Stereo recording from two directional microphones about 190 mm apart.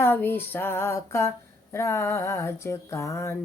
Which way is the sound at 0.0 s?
10° left (ahead or behind).